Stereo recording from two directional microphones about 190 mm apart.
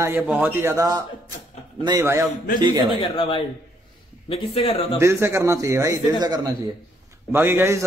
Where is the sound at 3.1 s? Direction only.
30° left (ahead or behind).